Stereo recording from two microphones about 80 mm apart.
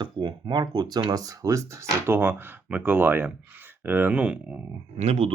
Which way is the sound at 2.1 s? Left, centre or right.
Right.